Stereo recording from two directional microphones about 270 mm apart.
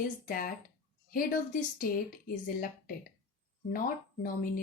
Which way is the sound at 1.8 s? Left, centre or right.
Left.